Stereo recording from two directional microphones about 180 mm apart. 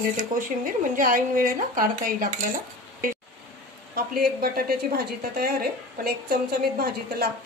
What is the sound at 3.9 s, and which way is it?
A woman's voice, 55° right (ahead or behind).